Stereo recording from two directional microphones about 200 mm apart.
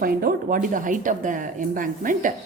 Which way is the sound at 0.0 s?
45° right (ahead or behind).